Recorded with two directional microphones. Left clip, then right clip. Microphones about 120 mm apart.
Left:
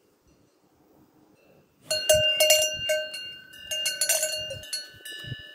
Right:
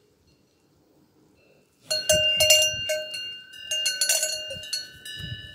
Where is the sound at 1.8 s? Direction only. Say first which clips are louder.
Even; 35° left (ahead or behind).